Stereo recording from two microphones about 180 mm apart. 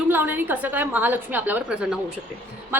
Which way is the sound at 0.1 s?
10° right (ahead or behind).